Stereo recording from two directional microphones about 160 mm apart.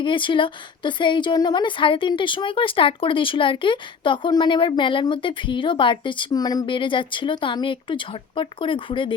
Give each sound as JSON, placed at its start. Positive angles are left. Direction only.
{"t": 0.0, "sound": "a woman's voice", "side_deg": 30}